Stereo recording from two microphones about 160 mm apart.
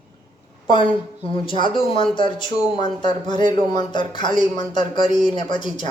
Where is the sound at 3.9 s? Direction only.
30° left (ahead or behind).